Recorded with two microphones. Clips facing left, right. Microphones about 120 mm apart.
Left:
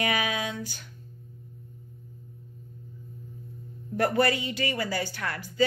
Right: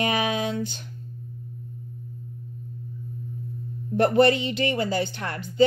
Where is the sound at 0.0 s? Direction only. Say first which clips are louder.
Right 4 dB; 25° right (ahead or behind).